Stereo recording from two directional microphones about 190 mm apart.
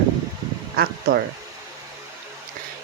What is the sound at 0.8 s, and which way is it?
Speech, 55° right (ahead or behind).